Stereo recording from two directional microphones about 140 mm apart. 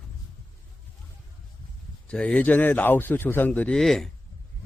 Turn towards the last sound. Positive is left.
turn(degrees=0)  # may be behind; listen again after turning